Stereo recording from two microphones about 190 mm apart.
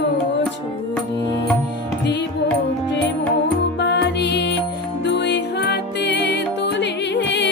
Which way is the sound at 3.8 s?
65° left (ahead or behind).